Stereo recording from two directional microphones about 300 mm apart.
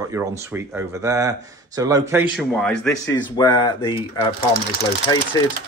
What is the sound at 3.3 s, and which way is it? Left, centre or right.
Speech, centre.